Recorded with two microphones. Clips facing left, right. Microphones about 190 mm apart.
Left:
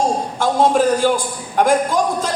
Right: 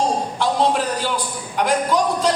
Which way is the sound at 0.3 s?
45° left (ahead or behind).